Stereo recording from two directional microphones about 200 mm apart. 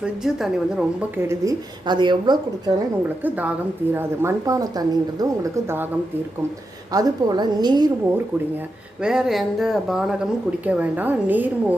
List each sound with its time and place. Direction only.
0.0 s a woman's voice: 5° right (ahead or behind); by 2.7 s 20° right (ahead or behind)
3.9 s speech: 10° right (ahead or behind)
6.9 s a woman's voice: 20° right (ahead or behind)
9.0 s speech: 5° right (ahead or behind)